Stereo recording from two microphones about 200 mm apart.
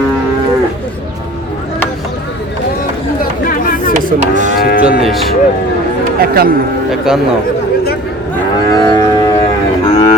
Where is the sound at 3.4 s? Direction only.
45° left (ahead or behind).